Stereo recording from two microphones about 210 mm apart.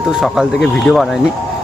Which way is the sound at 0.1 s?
Centre (ahead or behind).